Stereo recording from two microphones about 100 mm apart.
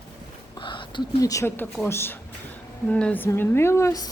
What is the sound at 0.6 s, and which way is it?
Whispering, 55° left (ahead or behind).